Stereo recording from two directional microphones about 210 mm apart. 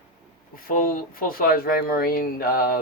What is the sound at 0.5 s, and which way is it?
Speech, 40° left (ahead or behind).